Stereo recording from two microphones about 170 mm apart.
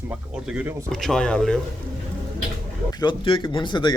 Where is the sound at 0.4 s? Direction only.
Centre (ahead or behind).